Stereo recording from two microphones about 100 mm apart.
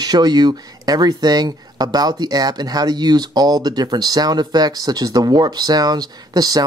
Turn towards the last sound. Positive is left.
turn(degrees=-40)  # may be behind; listen again after turning